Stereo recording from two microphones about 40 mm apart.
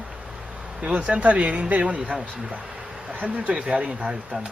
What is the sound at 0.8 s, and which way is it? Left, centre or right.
Speech, right.